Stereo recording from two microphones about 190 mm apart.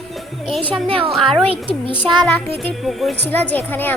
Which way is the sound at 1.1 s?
Centre (ahead or behind).